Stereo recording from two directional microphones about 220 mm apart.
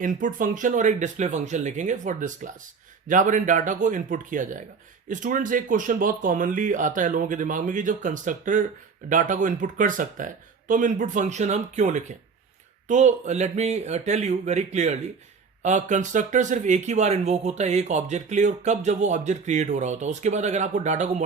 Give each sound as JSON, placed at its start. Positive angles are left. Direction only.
{"t": 0.0, "sound": "speech", "side_deg": -40}